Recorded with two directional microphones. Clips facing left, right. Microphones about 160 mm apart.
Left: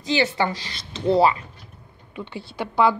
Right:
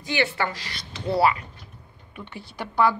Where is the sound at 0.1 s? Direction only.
20° left (ahead or behind).